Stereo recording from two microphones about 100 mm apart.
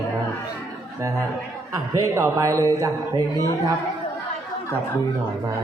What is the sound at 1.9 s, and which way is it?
A man's voice, 30° right (ahead or behind).